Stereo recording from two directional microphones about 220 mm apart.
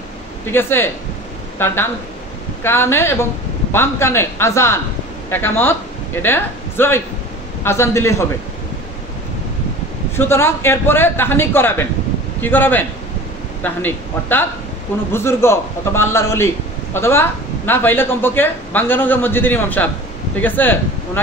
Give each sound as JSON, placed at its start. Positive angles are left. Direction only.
{"t": 0.5, "sound": "a man's voice", "side_deg": 10}
{"t": 10.1, "sound": "a man's voice", "side_deg": 10}